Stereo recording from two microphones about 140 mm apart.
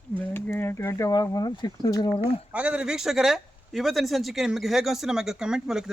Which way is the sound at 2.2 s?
10° right (ahead or behind).